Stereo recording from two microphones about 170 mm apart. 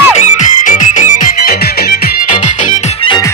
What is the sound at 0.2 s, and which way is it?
Music, 45° left (ahead or behind).